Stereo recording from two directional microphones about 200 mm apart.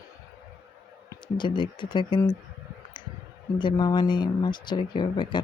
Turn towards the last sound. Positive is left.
turn(degrees=20)  # may be behind; listen again after turning